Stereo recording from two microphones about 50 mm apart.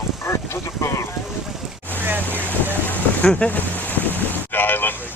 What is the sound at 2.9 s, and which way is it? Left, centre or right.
Boat, left.